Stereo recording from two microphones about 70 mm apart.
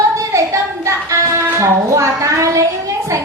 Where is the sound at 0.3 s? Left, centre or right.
Right.